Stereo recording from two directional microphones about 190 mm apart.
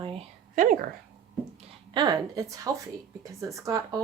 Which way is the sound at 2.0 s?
20° right (ahead or behind).